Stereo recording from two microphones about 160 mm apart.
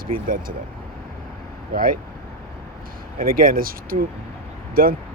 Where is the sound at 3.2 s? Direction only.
65° right (ahead or behind).